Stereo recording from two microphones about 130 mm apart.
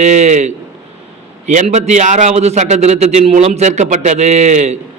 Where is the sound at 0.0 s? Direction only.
60° right (ahead or behind).